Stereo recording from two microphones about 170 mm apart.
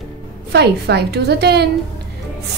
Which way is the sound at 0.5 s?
75° right (ahead or behind).